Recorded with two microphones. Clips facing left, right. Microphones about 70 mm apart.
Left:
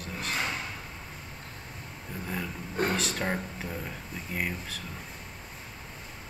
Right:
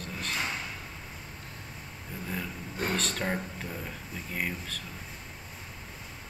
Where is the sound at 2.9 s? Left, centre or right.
Centre.